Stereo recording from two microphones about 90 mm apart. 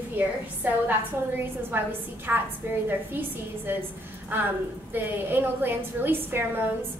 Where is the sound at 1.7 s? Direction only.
25° right (ahead or behind).